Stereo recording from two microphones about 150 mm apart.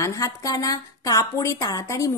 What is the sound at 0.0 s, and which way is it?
Speech, 20° left (ahead or behind).